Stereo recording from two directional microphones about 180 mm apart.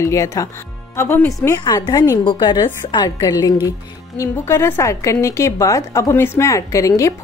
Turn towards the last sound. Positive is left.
turn(degrees=15)  # may be behind; listen again after turning